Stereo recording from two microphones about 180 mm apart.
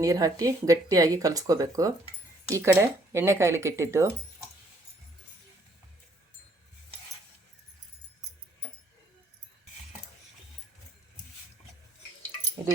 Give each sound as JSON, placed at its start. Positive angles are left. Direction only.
{"t": 0.0, "sound": "speech", "side_deg": -20}